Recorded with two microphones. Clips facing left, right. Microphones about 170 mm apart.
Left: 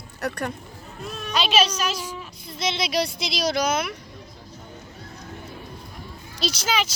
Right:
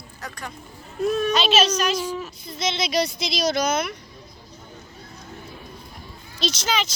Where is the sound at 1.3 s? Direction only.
10° left (ahead or behind).